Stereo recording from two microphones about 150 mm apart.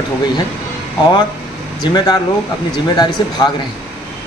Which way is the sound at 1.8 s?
25° left (ahead or behind).